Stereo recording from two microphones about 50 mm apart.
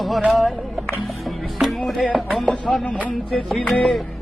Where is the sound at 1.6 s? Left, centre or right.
Centre.